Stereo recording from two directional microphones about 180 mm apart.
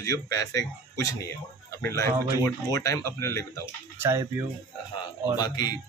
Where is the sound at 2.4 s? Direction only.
20° left (ahead or behind).